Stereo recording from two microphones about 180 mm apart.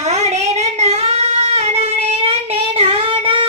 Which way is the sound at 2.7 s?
30° right (ahead or behind).